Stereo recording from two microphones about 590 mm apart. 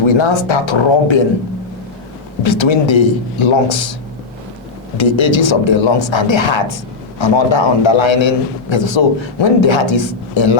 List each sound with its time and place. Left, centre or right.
0.0 s speech: left
2.4 s speech: left
4.9 s speech: left